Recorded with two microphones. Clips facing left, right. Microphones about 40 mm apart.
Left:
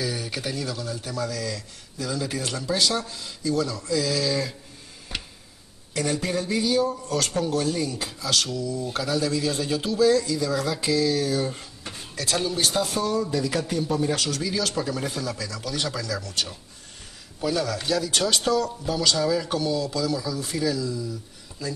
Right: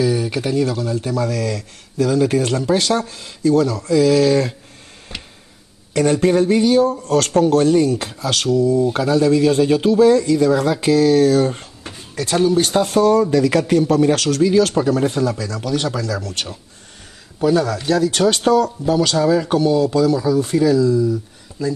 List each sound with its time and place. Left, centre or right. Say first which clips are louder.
0.0 s a sound: right 11 dB; right
0.7 s speech: right 10 dB; right
5.9 s speech: right 11 dB; right
8.1 s speech: right 8 dB; right
12.2 s speech: right 9 dB; right
12.5 s speech: right 9 dB; right
14.5 s speech: right 12 dB; right
17.8 s speech: right 9 dB; right